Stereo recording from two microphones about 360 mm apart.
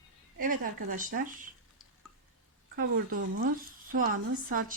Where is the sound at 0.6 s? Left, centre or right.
Right.